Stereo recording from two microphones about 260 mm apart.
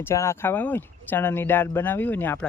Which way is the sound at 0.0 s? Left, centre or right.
Centre.